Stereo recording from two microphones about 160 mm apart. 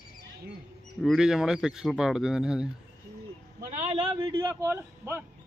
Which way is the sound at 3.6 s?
50° right (ahead or behind).